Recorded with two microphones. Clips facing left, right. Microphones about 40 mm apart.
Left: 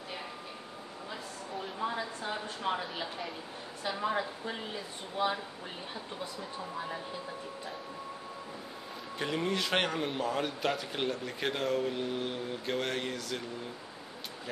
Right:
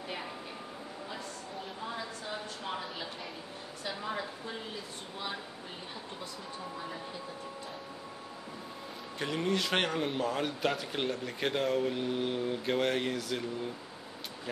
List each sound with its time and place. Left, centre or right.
2.2 s a sound: centre
3.8 s a woman's voice: left
9.2 s speech: centre